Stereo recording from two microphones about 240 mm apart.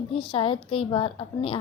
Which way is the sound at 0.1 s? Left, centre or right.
Left.